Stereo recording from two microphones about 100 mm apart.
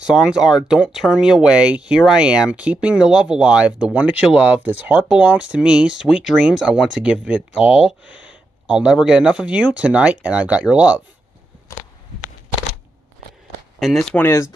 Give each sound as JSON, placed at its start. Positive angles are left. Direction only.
{"t": 0.0, "sound": "speech", "side_deg": -5}
{"t": 13.7, "sound": "speech", "side_deg": 0}
{"t": 14.1, "sound": "speech", "side_deg": 25}